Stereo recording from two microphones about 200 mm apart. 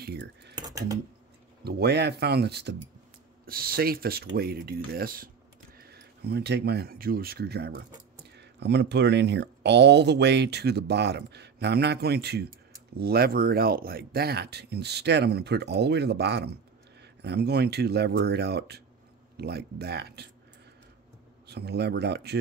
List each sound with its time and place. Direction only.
0.0 s speech: 55° right (ahead or behind)
0.7 s speech: 15° right (ahead or behind)
1.6 s speech: 55° right (ahead or behind)
21.5 s speech: 55° right (ahead or behind)